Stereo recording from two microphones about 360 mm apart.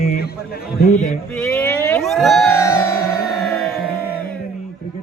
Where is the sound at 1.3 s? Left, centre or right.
Centre.